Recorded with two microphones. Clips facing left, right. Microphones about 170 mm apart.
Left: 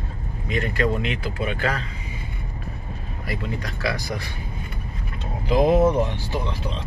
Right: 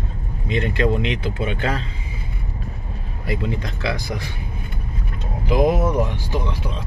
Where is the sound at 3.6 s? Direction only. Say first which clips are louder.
Right 1 dB; 20° right (ahead or behind).